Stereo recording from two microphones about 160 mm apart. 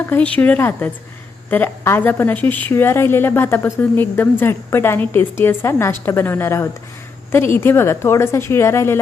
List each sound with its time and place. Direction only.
0.0 s a woman's voice: 10° left (ahead or behind)